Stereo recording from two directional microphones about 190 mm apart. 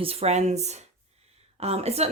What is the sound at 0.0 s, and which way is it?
Speech, 30° right (ahead or behind).